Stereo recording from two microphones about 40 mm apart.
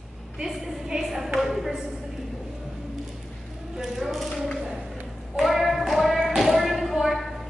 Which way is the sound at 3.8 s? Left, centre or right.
Centre.